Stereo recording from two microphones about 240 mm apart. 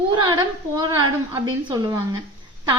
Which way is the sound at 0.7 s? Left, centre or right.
Centre.